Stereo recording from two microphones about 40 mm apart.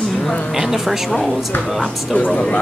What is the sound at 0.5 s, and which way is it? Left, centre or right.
A woman's voice, centre.